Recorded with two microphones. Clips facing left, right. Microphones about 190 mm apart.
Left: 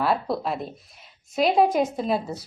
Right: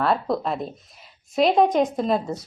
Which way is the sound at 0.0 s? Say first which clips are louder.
Right 2 dB; 5° left (ahead or behind).